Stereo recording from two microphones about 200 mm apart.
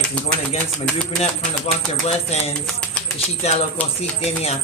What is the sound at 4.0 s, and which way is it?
Speech, 30° left (ahead or behind).